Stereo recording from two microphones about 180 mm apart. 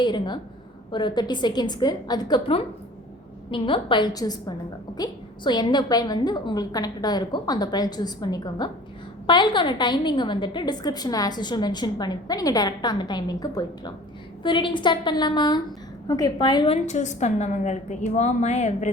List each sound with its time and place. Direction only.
0.0 s a woman's voice: 25° left (ahead or behind); by 18.9 s 40° left (ahead or behind)